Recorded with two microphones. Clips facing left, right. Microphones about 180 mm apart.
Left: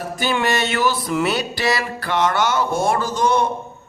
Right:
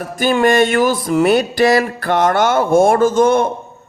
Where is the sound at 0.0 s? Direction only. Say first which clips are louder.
Right 7 dB; 50° right (ahead or behind).